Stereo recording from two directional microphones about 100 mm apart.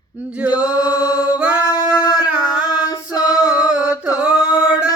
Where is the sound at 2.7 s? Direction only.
40° left (ahead or behind).